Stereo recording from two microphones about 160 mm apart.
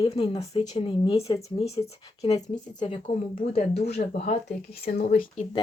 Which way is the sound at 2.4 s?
25° left (ahead or behind).